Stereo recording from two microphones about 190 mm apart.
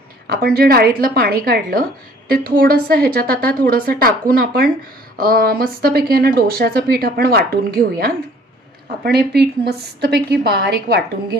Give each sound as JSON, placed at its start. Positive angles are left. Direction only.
{"t": 0.3, "sound": "a woman's voice", "side_deg": -55}